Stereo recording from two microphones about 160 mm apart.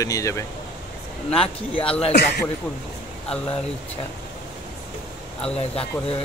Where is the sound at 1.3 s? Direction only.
35° left (ahead or behind).